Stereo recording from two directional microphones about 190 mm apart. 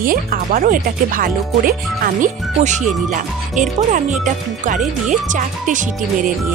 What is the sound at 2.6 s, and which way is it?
Speech, 40° right (ahead or behind).